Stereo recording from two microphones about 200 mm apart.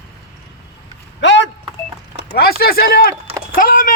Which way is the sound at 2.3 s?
50° left (ahead or behind).